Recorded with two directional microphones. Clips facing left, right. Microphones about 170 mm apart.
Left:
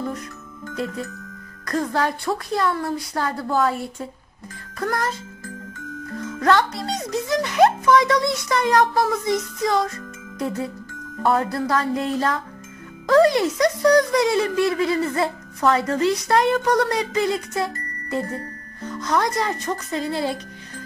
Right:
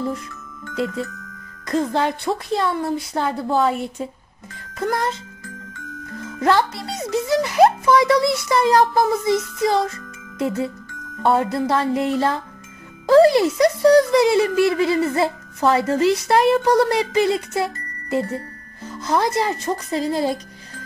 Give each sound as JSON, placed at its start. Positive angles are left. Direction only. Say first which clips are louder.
{"t": 1.7, "sound": "speech", "louder": "right 2 dB", "side_deg": -25}
{"t": 6.4, "sound": "speech", "louder": "right 1 dB", "side_deg": -25}
{"t": 11.2, "sound": "speech", "louder": "right 2 dB", "side_deg": -25}
{"t": 18.9, "sound": "speech", "louder": "right 2 dB", "side_deg": -30}